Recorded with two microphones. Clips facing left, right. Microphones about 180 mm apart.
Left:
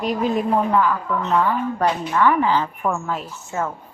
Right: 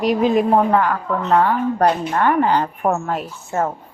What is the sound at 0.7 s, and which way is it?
A woman's voice, 60° right (ahead or behind).